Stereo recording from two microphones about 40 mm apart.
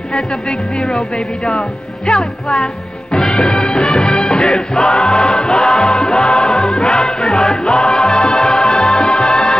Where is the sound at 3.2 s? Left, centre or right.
Centre.